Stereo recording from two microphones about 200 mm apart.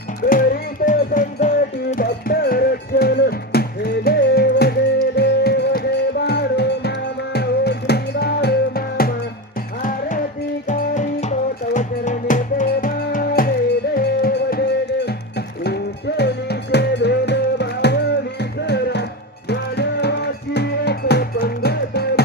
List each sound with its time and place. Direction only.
0.2 s music: 45° left (ahead or behind)
10.7 s music: 35° left (ahead or behind); by 22.2 s 55° left (ahead or behind)